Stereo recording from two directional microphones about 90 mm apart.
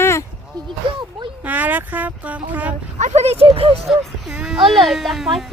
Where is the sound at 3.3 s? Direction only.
90° right.